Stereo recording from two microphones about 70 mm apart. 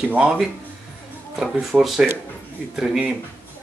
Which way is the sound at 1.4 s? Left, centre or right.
Centre.